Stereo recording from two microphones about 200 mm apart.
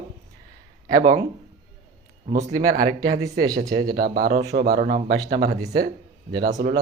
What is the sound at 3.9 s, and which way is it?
Speech, 50° right (ahead or behind).